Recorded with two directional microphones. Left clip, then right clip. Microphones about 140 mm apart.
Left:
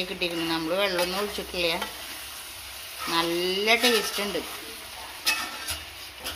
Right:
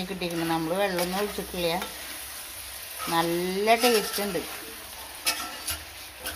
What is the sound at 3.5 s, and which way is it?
Speech, 55° right (ahead or behind).